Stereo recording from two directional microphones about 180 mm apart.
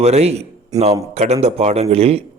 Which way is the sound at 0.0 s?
35° right (ahead or behind).